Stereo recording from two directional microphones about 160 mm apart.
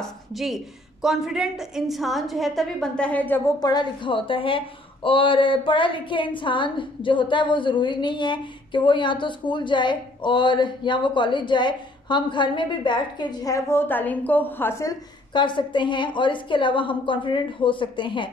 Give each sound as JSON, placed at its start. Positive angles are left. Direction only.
{"t": 0.0, "sound": "a woman's voice", "side_deg": 0}
{"t": 3.5, "sound": "a woman's voice", "side_deg": 25}